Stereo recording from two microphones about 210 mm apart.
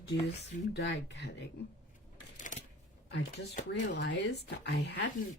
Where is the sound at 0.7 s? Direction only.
55° left (ahead or behind).